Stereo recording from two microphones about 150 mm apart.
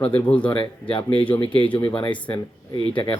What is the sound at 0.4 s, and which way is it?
A man's voice, 35° left (ahead or behind).